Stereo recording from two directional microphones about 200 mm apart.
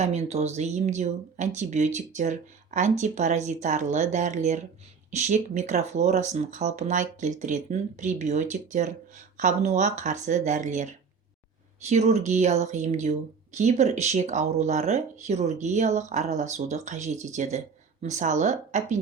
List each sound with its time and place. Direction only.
0.0 s speech: 35° right (ahead or behind)
11.9 s speech: 35° right (ahead or behind)